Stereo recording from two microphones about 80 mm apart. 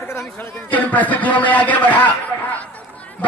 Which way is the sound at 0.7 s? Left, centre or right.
Left.